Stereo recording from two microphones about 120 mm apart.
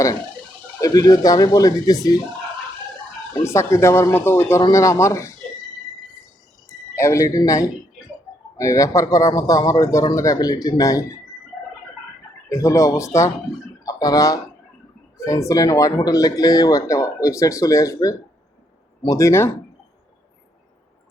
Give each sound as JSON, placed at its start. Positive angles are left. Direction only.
{"t": 0.8, "sound": "speech", "side_deg": 30}
{"t": 3.4, "sound": "speech", "side_deg": 25}
{"t": 6.9, "sound": "speech", "side_deg": 25}
{"t": 12.5, "sound": "speech", "side_deg": 25}